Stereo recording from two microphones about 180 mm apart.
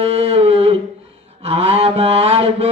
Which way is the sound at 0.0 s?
35° right (ahead or behind).